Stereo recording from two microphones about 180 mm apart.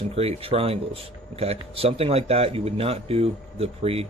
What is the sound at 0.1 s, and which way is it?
A man's voice, 35° right (ahead or behind).